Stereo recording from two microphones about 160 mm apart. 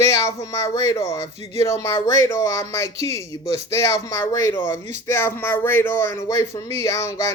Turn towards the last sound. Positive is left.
turn(degrees=20)  # may be behind; listen again after turning